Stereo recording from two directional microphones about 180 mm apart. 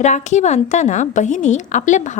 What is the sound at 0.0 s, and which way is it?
A woman's voice, 40° left (ahead or behind).